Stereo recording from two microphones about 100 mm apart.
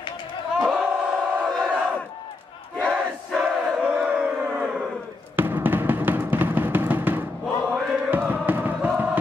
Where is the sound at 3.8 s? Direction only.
10° right (ahead or behind).